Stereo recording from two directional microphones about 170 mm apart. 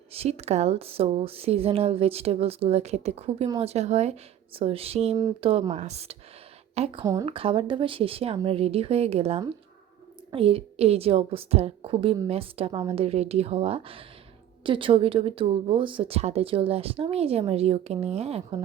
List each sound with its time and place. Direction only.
0.1 s speech: 35° right (ahead or behind)
7.0 s speech: 20° right (ahead or behind)
7.3 s speech: 35° right (ahead or behind)